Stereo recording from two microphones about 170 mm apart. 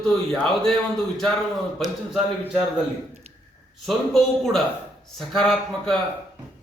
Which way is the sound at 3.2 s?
35° right (ahead or behind).